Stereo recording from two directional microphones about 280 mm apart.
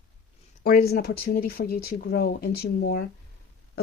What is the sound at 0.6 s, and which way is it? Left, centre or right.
Speech, left.